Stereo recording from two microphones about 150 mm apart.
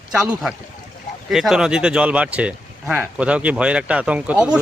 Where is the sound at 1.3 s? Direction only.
Centre (ahead or behind).